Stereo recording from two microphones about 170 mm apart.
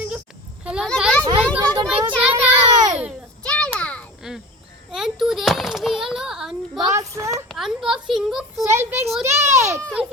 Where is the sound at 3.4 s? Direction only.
5° left (ahead or behind).